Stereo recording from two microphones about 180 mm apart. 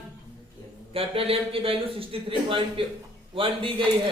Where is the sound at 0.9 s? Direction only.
30° right (ahead or behind).